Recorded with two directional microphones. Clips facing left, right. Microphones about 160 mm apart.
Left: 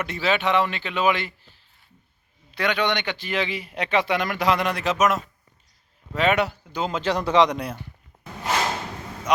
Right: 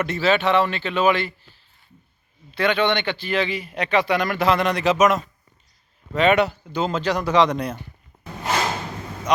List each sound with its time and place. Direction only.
0.0 s a man's voice: 15° left (ahead or behind)
2.5 s a man's voice: 15° left (ahead or behind)
7.0 s speech: 25° left (ahead or behind)
7.4 s a man's voice: 10° left (ahead or behind)